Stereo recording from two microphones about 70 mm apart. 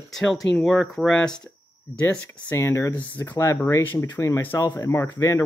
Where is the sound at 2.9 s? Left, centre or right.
Left.